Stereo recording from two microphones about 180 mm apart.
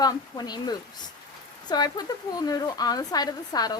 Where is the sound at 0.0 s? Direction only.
20° left (ahead or behind).